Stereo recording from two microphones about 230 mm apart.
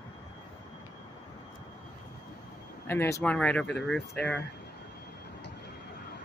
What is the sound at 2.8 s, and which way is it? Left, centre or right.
Speech, centre.